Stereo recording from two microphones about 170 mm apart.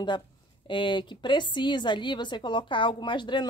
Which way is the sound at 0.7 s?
30° left (ahead or behind).